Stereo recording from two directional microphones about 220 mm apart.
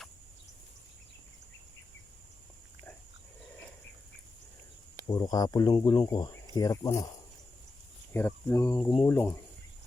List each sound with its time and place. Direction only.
5.0 s speech: 20° left (ahead or behind)
8.1 s speech: 10° left (ahead or behind)
8.8 s speech: 25° left (ahead or behind)
9.0 s speech: 10° left (ahead or behind)